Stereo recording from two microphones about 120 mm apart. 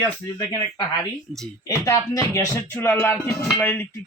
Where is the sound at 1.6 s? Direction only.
30° left (ahead or behind).